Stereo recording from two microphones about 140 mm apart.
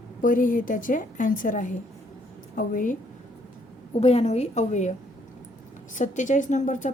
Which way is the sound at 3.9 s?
45° left (ahead or behind).